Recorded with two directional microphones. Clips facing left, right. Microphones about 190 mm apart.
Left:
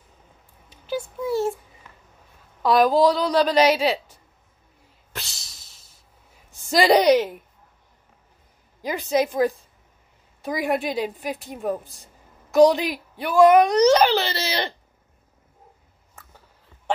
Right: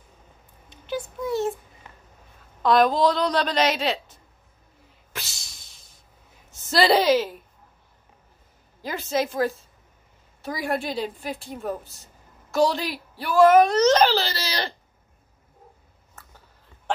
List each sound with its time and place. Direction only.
0.7 s a sound: 5° left (ahead or behind)
2.6 s speech: 5° left (ahead or behind)
5.1 s a sound: centre (ahead or behind)
6.7 s speech: 15° left (ahead or behind)
9.1 s speech: 15° left (ahead or behind)
11.6 s speech: centre (ahead or behind)
12.4 s a woman's voice: 15° left (ahead or behind)
14.2 s speech: 25° left (ahead or behind)